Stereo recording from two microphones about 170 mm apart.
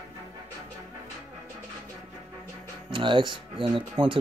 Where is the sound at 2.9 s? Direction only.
30° right (ahead or behind).